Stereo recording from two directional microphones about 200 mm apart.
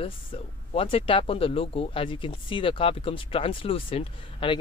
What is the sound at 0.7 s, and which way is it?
Speech, 25° left (ahead or behind).